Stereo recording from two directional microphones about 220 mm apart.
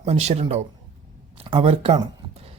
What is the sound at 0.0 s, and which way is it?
Speech, 30° right (ahead or behind).